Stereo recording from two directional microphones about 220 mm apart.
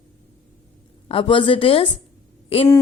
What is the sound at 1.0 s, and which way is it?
Speech, 25° left (ahead or behind).